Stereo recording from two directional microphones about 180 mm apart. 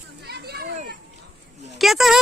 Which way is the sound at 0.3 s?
65° right (ahead or behind).